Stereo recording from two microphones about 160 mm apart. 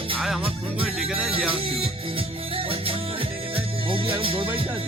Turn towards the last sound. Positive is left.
turn(degrees=-35)  # may be behind; listen again after turning